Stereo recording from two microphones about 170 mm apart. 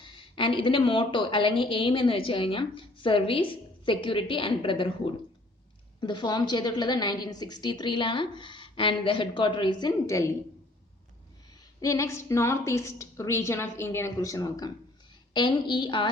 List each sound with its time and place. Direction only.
0.0 s a woman's voice: 30° left (ahead or behind)
11.8 s a woman's voice: 20° left (ahead or behind)